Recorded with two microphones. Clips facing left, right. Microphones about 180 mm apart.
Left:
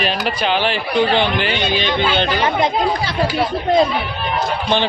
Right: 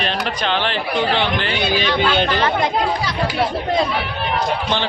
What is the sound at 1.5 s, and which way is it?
Speech, 5° right (ahead or behind).